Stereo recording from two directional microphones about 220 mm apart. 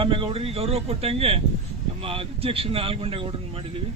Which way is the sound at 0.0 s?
25° right (ahead or behind).